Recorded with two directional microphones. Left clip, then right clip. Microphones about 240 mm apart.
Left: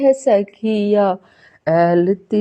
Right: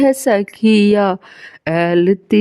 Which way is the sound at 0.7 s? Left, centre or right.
Right.